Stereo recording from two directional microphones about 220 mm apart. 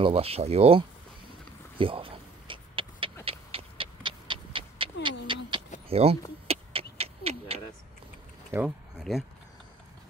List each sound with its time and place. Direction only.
0.0 s speech: 25° right (ahead or behind)
1.8 s a sound: 25° right (ahead or behind)
8.5 s speech: 5° right (ahead or behind)